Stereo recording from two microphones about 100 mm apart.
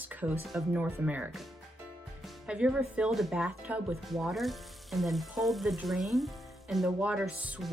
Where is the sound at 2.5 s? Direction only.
10° right (ahead or behind).